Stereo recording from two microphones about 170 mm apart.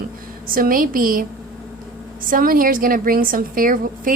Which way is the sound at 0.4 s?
55° right (ahead or behind).